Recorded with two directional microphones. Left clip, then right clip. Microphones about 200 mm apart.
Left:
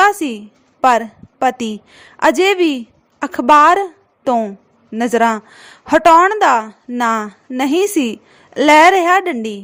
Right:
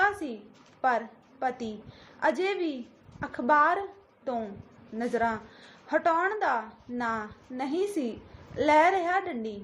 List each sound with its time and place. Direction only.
0.8 s a woman's voice: 55° left (ahead or behind)